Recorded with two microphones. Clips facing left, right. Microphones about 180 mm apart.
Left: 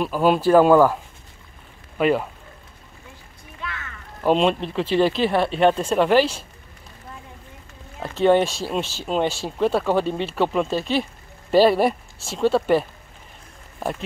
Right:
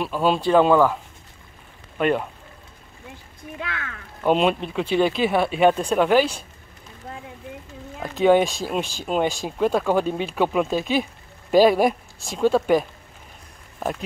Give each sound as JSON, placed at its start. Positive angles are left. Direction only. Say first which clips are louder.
{"t": 0.0, "sound": "speech", "louder": "left 3 dB", "side_deg": 0}
{"t": 2.0, "sound": "speech", "louder": "left 2 dB", "side_deg": 5}
{"t": 3.6, "sound": "a sound", "louder": "even", "side_deg": -75}
{"t": 4.2, "sound": "speech", "louder": "left 1 dB", "side_deg": 0}
{"t": 8.2, "sound": "speech", "louder": "even", "side_deg": -5}
{"t": 12.3, "sound": "speech", "louder": "even", "side_deg": 5}